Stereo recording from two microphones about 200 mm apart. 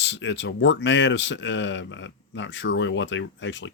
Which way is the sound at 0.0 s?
65° left (ahead or behind).